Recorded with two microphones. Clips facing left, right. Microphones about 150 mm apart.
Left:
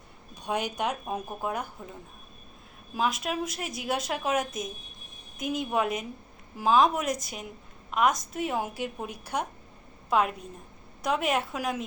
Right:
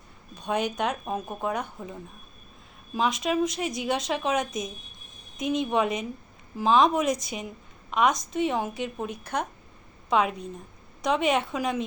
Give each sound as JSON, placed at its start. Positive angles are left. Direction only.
{"t": 0.3, "sound": "speech", "side_deg": 10}